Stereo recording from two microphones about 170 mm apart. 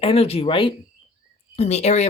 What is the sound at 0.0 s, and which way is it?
Speech, 35° left (ahead or behind).